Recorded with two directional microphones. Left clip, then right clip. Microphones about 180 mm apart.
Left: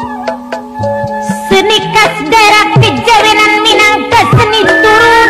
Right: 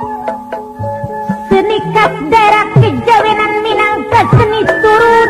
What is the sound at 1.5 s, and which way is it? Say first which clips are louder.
Music: left 3 dB; 35° left (ahead or behind).